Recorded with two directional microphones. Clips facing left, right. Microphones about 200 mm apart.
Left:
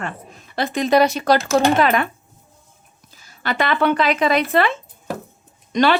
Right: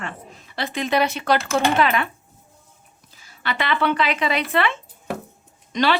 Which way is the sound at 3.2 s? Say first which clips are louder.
Left 4 dB; 40° left (ahead or behind).